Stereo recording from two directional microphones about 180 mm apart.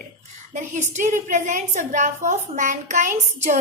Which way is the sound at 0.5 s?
40° right (ahead or behind).